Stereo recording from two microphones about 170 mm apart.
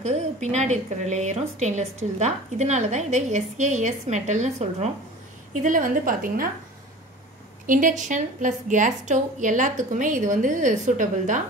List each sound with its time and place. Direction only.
0.0 s a woman's voice: 40° right (ahead or behind)
7.6 s a woman's voice: 50° right (ahead or behind)